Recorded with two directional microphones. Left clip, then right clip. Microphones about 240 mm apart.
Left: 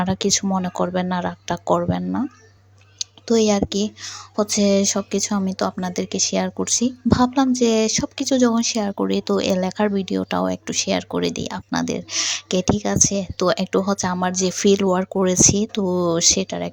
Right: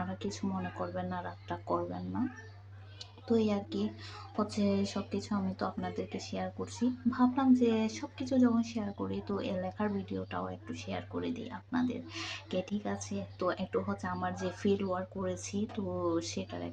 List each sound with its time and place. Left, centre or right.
0.0 s speech: left
3.2 s speech: left